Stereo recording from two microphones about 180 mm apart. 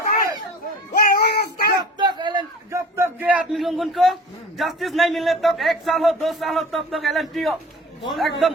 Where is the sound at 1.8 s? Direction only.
25° right (ahead or behind).